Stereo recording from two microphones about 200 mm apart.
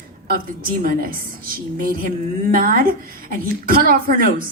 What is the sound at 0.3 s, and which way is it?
A woman's voice, 45° right (ahead or behind).